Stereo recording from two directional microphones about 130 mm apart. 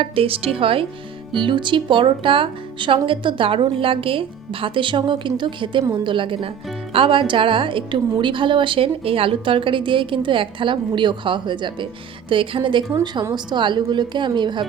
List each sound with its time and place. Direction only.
0.0 s a woman's voice: 45° right (ahead or behind)